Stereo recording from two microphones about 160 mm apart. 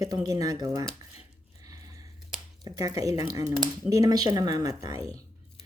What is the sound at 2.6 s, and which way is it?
Speech, 20° right (ahead or behind).